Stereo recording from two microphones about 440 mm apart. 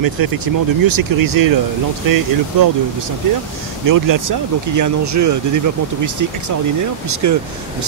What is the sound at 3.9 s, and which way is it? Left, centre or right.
Speech, right.